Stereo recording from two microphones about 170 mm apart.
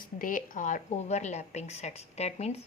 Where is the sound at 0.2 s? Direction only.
55° left (ahead or behind).